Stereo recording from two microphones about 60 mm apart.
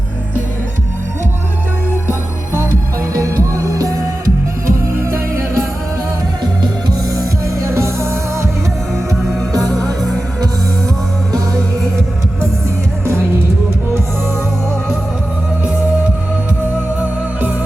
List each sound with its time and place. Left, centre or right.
3.2 s music: right
4.6 s music: right
7.6 s music: right
9.5 s music: right
11.3 s music: right